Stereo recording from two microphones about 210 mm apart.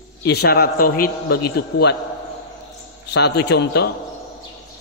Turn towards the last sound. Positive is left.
turn(degrees=50)  # may be behind; listen again after turning